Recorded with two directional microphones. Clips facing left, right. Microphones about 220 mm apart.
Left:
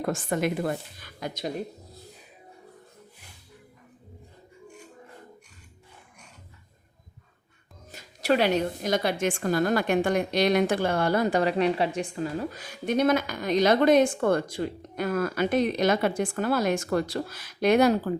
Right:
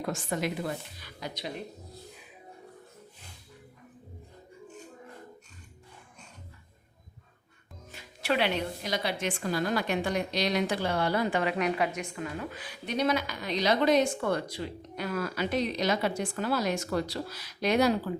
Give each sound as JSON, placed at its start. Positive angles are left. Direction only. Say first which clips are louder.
{"t": 0.0, "sound": "speech", "louder": "left 5 dB", "side_deg": 50}
{"t": 7.9, "sound": "speech", "louder": "left 6 dB", "side_deg": 40}